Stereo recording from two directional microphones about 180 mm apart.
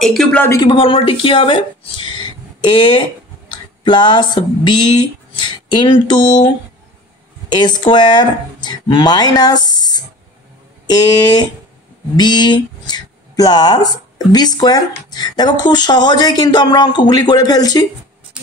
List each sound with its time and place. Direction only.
0.0 s speech: centre (ahead or behind)
0.5 s speech: 25° left (ahead or behind)
5.8 s speech: 25° left (ahead or behind)
7.5 s speech: 25° left (ahead or behind)